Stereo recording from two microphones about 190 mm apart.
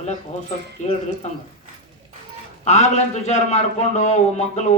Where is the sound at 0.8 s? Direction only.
40° left (ahead or behind).